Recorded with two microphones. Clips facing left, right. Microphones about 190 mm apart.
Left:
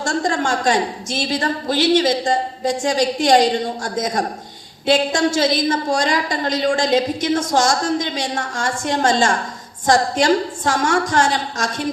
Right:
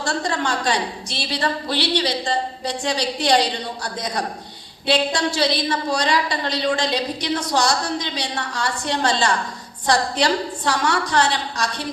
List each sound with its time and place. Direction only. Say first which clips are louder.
0.0 s a woman's voice: left 3 dB; 45° left (ahead or behind)